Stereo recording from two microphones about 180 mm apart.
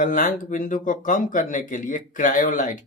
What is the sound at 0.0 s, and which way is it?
Speech, 45° left (ahead or behind).